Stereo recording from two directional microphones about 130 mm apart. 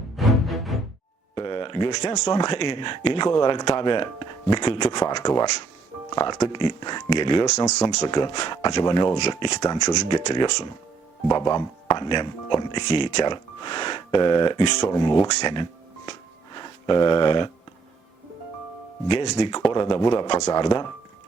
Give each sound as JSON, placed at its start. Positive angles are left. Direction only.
{"t": 0.2, "sound": "music", "side_deg": 0}
{"t": 1.4, "sound": "speech", "side_deg": 40}
{"t": 19.4, "sound": "speech", "side_deg": 35}